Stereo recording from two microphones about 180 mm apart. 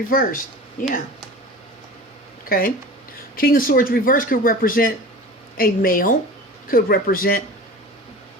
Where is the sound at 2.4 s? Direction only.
55° left (ahead or behind).